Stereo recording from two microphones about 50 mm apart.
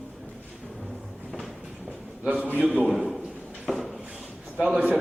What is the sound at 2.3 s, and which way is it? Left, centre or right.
Speech, right.